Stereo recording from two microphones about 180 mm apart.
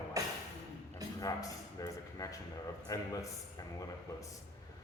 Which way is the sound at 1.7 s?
20° left (ahead or behind).